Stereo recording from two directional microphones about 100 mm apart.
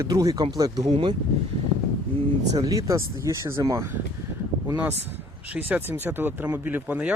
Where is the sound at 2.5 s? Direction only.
35° right (ahead or behind).